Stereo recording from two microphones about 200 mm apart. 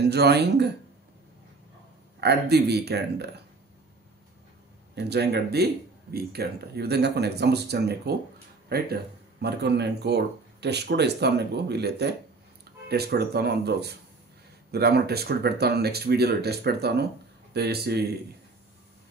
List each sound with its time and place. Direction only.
0.0 s speech: 55° right (ahead or behind)
2.1 s speech: 55° right (ahead or behind)
4.9 s speech: 55° right (ahead or behind)